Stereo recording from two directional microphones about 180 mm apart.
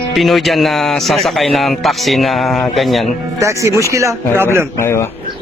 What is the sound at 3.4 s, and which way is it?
Speech, 15° right (ahead or behind).